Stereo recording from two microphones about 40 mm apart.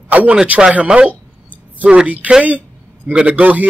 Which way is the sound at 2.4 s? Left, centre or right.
Right.